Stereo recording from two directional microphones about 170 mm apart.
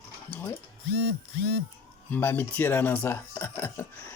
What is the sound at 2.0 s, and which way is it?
Speech, 10° left (ahead or behind).